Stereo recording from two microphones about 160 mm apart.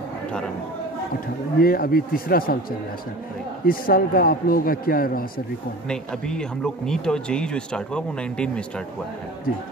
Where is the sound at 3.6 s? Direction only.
65° left (ahead or behind).